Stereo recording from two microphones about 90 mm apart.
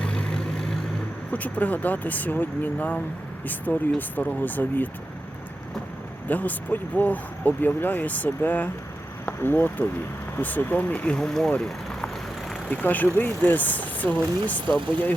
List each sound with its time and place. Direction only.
0.0 s vehicle: 10° left (ahead or behind)
1.3 s speech: 15° left (ahead or behind)
6.2 s speech: 20° left (ahead or behind)
12.6 s speech: 15° left (ahead or behind)